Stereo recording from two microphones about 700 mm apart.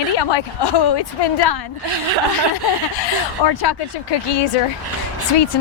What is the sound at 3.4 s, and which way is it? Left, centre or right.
Speech, left.